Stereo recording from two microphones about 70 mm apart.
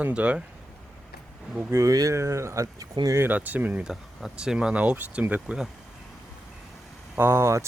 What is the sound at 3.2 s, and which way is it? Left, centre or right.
Speech, right.